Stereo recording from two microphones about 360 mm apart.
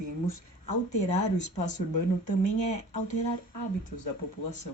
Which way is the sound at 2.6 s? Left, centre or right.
Centre.